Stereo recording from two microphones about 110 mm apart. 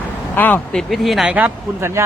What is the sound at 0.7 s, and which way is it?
Speech, centre (ahead or behind).